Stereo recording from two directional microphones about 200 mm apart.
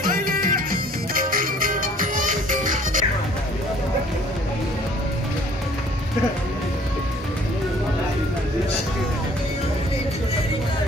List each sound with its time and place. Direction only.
0.0 s music: 45° right (ahead or behind)